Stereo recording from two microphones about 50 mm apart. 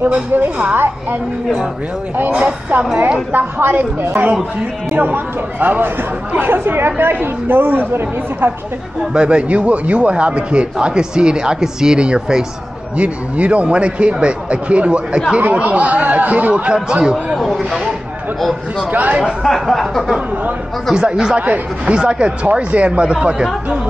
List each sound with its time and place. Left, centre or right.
2.3 s a man's voice: right
3.3 s a woman's voice: right
9.1 s a man's voice: centre
17.4 s a sound: centre
18.9 s a woman's voice: right
19.4 s a sound: centre
20.9 s a man's voice: centre